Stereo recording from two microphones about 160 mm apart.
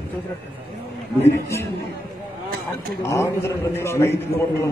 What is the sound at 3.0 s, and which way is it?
A man's voice, 15° left (ahead or behind).